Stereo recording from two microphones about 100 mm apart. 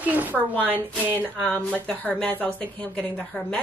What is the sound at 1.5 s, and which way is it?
Speech, 10° left (ahead or behind).